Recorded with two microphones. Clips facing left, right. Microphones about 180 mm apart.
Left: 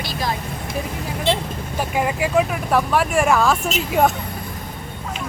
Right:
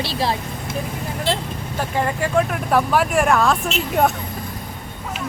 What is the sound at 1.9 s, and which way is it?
Speech, 10° left (ahead or behind).